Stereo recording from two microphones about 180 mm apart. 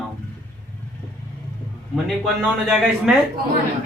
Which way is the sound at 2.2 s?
Centre (ahead or behind).